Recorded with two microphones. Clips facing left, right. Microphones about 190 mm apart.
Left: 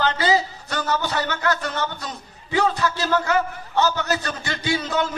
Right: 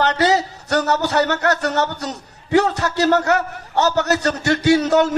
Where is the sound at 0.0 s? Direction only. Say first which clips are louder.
Right 3 dB; 70° right (ahead or behind).